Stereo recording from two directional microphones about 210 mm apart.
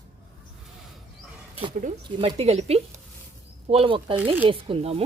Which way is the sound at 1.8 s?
25° right (ahead or behind).